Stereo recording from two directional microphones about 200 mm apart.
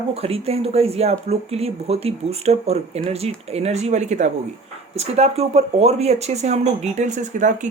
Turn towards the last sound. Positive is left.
turn(degrees=-40)  # may be behind; listen again after turning